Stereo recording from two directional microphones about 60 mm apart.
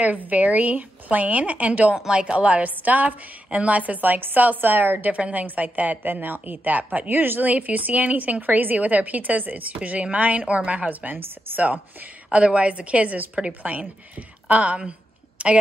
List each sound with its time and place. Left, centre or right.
0.0 s a woman's voice: right
5.1 s a woman's voice: right
15.4 s a sound: right